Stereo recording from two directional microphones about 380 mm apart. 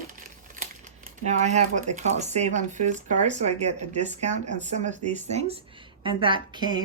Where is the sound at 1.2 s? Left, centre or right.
Centre.